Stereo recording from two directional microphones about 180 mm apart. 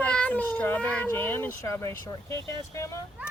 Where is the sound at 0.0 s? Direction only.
5° left (ahead or behind).